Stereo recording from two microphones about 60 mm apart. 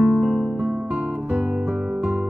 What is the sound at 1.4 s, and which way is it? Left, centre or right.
Guitar, right.